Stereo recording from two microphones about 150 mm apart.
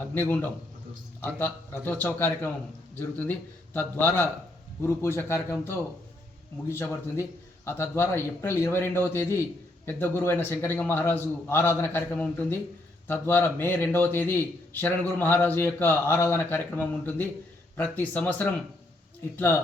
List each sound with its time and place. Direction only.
0.1 s a man's voice: 15° left (ahead or behind)